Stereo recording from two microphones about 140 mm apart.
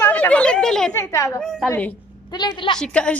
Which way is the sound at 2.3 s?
30° left (ahead or behind).